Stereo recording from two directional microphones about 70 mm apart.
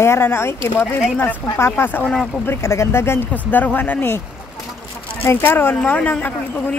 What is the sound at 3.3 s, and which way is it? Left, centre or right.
Speech, left.